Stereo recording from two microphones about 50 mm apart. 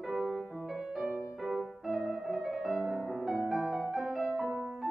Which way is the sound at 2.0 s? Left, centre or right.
Centre.